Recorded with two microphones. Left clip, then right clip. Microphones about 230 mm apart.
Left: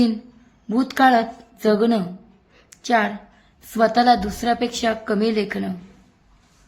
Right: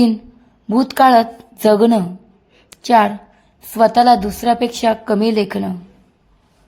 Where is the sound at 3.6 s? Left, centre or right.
Centre.